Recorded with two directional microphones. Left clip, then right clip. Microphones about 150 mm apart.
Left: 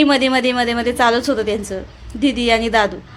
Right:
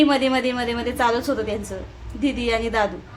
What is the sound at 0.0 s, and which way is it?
A woman's voice, 35° left (ahead or behind).